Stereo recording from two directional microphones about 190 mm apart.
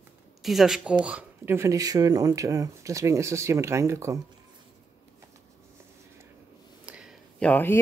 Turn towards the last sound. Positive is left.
turn(degrees=10)  # may be behind; listen again after turning